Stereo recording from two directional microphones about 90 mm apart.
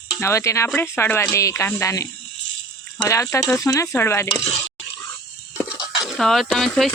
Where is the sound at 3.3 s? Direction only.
30° left (ahead or behind).